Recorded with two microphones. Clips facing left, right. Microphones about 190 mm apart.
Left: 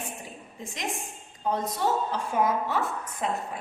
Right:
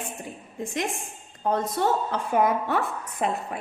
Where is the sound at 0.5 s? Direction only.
55° right (ahead or behind).